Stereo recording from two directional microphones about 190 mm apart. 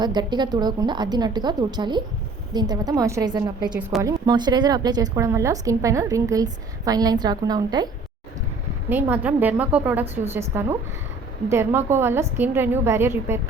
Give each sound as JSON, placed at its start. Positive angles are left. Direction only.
{"t": 0.0, "sound": "a woman's voice", "side_deg": -20}
{"t": 8.9, "sound": "a woman's voice", "side_deg": -10}